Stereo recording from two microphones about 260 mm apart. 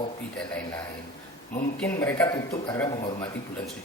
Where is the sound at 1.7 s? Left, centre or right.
Centre.